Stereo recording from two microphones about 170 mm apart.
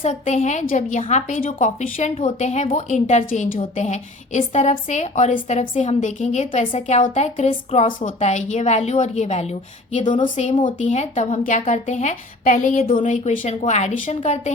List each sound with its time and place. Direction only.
0.0 s a woman's voice: 40° left (ahead or behind)